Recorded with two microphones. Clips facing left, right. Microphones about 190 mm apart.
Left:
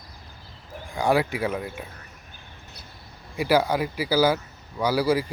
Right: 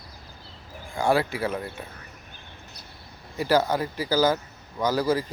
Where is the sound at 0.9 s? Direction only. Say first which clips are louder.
Left 1 dB; 15° left (ahead or behind).